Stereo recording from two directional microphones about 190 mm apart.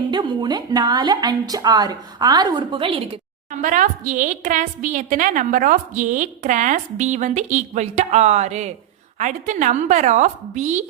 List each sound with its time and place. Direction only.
0.1 s a woman's voice: 20° right (ahead or behind)
3.6 s a woman's voice: 45° right (ahead or behind)